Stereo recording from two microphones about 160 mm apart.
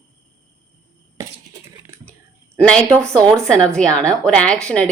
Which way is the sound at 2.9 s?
5° left (ahead or behind).